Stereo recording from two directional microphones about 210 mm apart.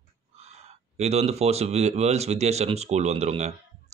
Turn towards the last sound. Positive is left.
turn(degrees=-30)  # may be behind; listen again after turning